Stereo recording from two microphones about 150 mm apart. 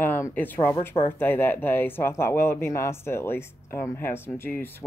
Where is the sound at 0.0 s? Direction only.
10° left (ahead or behind).